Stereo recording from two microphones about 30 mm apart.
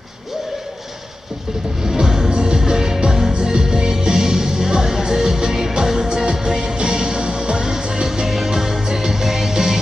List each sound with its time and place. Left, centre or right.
1.8 s music: centre